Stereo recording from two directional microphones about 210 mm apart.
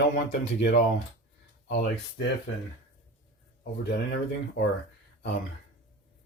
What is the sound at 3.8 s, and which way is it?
Speech, 50° left (ahead or behind).